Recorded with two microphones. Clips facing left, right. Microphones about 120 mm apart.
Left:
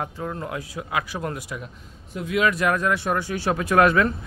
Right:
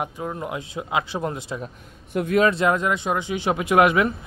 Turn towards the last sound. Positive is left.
turn(degrees=-15)  # may be behind; listen again after turning